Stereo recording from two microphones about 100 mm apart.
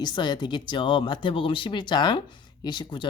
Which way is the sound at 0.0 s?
45° left (ahead or behind).